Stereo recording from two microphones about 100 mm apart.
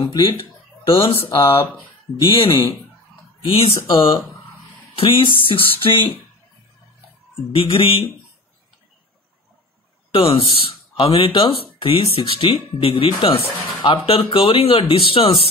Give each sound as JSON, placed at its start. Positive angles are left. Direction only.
{"t": 0.0, "sound": "speech", "side_deg": 60}
{"t": 7.5, "sound": "speech", "side_deg": 60}
{"t": 10.1, "sound": "speech", "side_deg": 60}